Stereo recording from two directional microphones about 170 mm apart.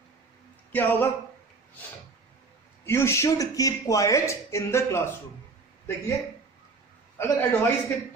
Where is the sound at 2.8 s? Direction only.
15° left (ahead or behind).